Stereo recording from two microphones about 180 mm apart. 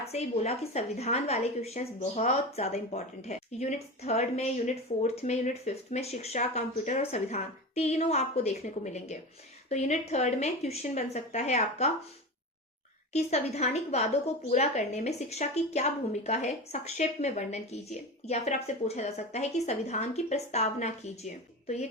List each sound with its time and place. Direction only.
0.0 s a woman's voice: 35° left (ahead or behind)
13.1 s a woman's voice: 35° left (ahead or behind)